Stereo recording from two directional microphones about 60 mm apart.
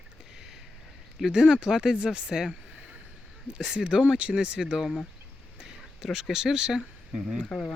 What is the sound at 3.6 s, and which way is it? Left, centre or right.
Speech, centre.